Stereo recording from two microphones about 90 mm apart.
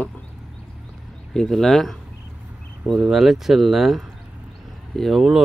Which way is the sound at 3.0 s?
5° right (ahead or behind).